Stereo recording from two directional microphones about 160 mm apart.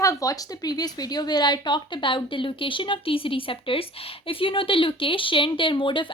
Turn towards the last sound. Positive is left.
turn(degrees=30)  # may be behind; listen again after turning